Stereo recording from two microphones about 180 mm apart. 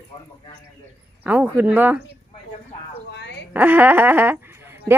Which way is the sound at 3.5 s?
10° right (ahead or behind).